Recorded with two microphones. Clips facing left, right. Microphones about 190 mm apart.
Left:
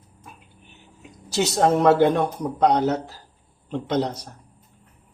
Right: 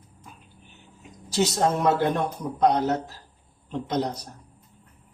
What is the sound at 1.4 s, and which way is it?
A man's voice, 70° left (ahead or behind).